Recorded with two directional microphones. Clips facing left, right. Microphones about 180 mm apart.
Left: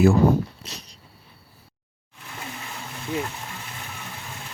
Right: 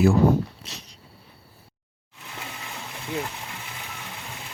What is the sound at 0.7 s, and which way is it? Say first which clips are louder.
Dog: left 2 dB; 40° left (ahead or behind).